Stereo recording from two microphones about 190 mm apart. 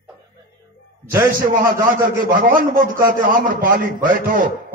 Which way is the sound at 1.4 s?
50° right (ahead or behind).